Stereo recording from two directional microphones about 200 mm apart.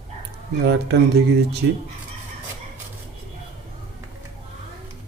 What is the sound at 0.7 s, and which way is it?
Speech, 55° right (ahead or behind).